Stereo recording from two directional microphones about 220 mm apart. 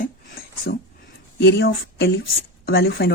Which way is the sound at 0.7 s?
50° left (ahead or behind).